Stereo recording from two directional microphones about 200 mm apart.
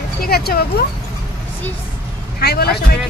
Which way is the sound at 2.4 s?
50° left (ahead or behind).